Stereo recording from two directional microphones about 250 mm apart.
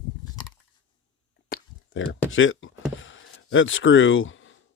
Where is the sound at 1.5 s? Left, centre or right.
Left.